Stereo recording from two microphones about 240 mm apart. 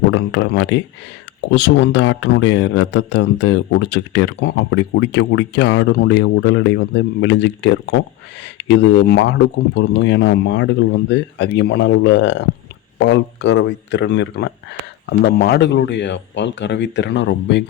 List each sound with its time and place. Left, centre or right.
0.1 s speech: left